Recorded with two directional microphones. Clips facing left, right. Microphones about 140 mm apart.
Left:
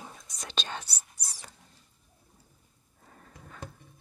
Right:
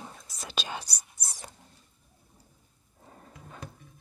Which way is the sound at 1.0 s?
20° right (ahead or behind).